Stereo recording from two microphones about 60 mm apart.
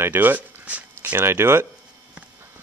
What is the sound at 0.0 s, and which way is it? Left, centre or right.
Speech, right.